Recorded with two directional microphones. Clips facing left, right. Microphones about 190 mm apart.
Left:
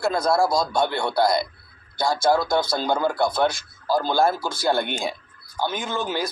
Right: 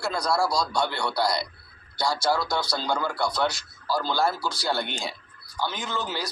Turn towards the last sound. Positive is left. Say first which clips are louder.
# left 5 dB
turn(degrees=50)  # may be behind; listen again after turning